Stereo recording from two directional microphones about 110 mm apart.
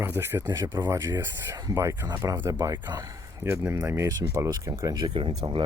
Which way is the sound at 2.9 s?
35° right (ahead or behind).